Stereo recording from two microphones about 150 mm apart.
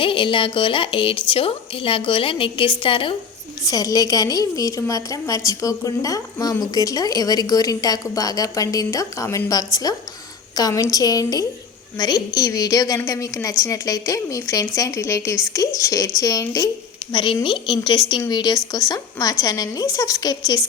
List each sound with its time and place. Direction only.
0.0 s a woman's voice: 35° left (ahead or behind)